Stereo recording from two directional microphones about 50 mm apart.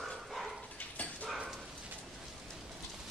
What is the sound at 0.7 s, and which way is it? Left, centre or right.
Dog, left.